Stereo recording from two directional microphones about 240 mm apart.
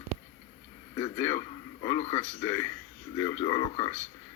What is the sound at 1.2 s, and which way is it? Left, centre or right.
A man's voice, centre.